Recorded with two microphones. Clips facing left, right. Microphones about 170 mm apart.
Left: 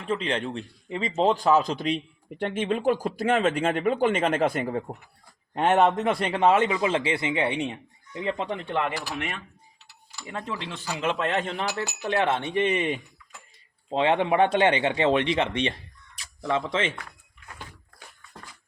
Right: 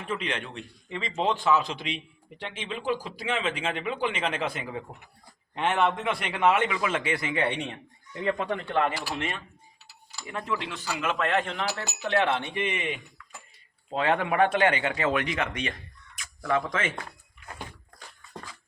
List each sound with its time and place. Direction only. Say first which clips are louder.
0.0 s a man's voice: left 5 dB; 30° left (ahead or behind)
10.2 s a man's voice: right 1 dB; 30° left (ahead or behind)
13.9 s speech: left 3 dB; 25° left (ahead or behind)